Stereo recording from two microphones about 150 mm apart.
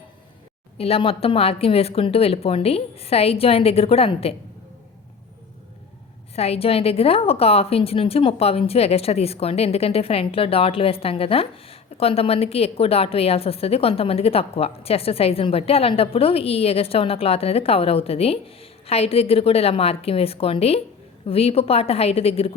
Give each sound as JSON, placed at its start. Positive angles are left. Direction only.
{"t": 0.8, "sound": "a woman's voice", "side_deg": 40}
{"t": 6.3, "sound": "a woman's voice", "side_deg": 45}